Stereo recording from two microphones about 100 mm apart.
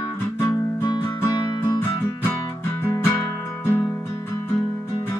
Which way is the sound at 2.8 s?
20° left (ahead or behind).